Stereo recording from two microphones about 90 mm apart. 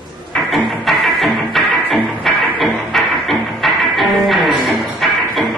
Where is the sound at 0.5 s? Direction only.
Centre (ahead or behind).